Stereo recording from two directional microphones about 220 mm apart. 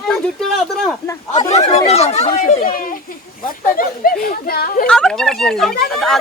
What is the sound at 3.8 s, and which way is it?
Speech, 40° left (ahead or behind).